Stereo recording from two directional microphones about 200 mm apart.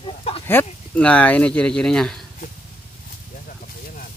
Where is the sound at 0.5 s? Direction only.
10° left (ahead or behind).